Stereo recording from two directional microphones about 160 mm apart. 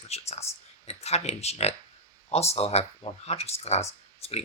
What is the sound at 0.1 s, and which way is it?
Speech, 40° left (ahead or behind).